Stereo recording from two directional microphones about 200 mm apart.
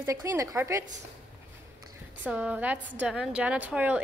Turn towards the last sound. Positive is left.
turn(degrees=-10)  # may be behind; listen again after turning